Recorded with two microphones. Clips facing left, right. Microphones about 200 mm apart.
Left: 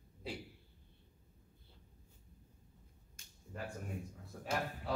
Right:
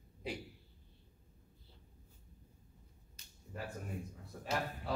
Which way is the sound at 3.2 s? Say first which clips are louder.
Left 1 dB; 50° left (ahead or behind).